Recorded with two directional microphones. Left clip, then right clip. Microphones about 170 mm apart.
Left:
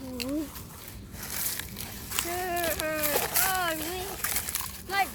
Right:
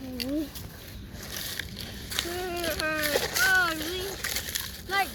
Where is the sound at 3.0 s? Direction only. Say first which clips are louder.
Right 6 dB; 40° left (ahead or behind).